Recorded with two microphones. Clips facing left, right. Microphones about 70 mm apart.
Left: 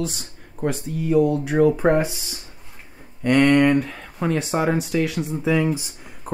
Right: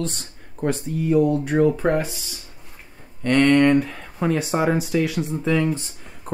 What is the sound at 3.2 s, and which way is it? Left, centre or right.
Speech, centre.